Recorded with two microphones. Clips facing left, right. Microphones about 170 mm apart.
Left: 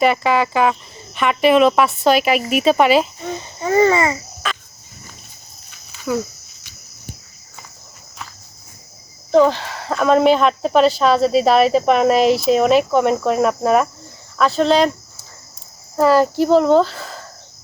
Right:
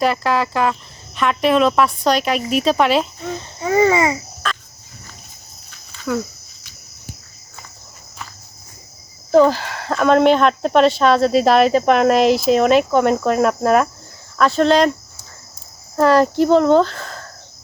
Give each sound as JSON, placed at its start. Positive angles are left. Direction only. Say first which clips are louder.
{"t": 0.0, "sound": "speech", "louder": "left 2 dB", "side_deg": 0}
{"t": 3.6, "sound": "speech", "louder": "even", "side_deg": -10}
{"t": 4.4, "sound": "a sound", "louder": "even", "side_deg": 5}
{"t": 5.7, "sound": "a sound", "louder": "left 1 dB", "side_deg": 5}
{"t": 9.3, "sound": "speech", "louder": "right 1 dB", "side_deg": 0}
{"t": 16.0, "sound": "speech", "louder": "even", "side_deg": 5}